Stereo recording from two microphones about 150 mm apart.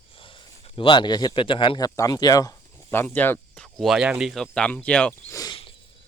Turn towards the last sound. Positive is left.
turn(degrees=25)  # may be behind; listen again after turning